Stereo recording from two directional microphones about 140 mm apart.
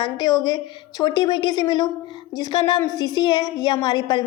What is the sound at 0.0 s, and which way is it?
A woman's voice, 30° left (ahead or behind).